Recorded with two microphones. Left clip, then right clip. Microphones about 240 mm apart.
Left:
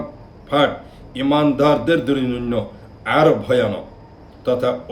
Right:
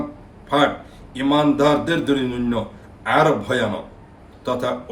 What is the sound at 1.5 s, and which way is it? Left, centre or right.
Speech, centre.